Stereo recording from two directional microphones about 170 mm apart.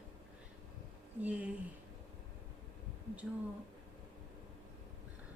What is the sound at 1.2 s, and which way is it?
Speech, 10° right (ahead or behind).